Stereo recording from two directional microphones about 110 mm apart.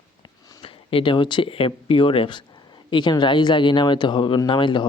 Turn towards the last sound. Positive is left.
turn(degrees=45)  # may be behind; listen again after turning